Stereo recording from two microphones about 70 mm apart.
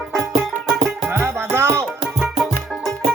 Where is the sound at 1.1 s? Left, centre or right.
Right.